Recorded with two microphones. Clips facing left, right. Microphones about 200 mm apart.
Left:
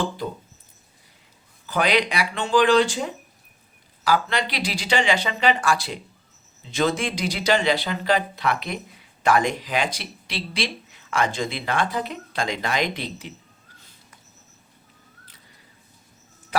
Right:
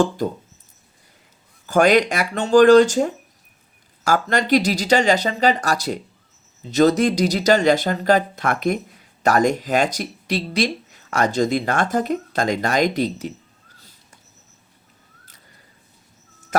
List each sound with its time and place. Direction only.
1.6 s speech: 45° right (ahead or behind)